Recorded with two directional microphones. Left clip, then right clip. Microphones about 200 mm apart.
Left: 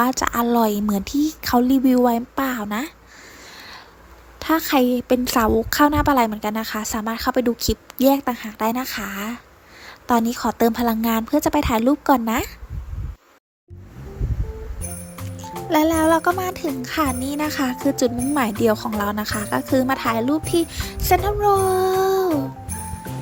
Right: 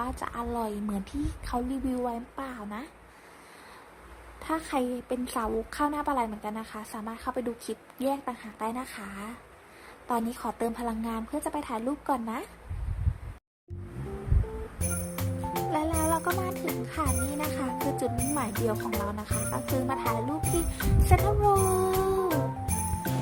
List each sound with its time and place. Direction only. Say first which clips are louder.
0.0 s a woman's voice: left 14 dB; 35° left (ahead or behind)
4.4 s a woman's voice: left 12 dB; 30° left (ahead or behind)
15.7 s a woman's voice: left 13 dB; 35° left (ahead or behind)